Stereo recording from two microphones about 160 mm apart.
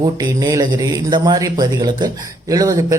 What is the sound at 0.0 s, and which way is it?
Speech, 25° right (ahead or behind).